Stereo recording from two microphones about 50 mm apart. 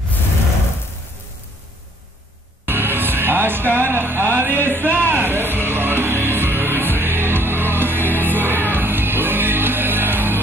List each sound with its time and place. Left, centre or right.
2.6 s music: right